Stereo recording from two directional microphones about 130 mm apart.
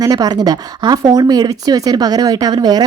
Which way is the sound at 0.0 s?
30° right (ahead or behind).